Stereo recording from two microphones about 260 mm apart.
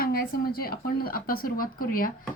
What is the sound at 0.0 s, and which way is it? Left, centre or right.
A woman's voice, left.